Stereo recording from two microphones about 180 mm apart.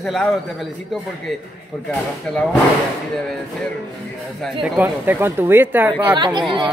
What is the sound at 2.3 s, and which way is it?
Speech, 5° left (ahead or behind).